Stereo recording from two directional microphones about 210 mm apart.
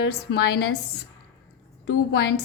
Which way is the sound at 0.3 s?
50° left (ahead or behind).